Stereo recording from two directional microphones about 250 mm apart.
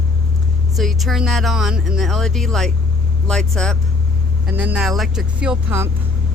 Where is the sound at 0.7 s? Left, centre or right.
Centre.